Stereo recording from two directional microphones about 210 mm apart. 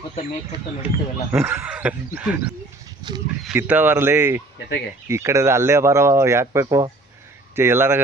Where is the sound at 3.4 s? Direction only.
10° right (ahead or behind).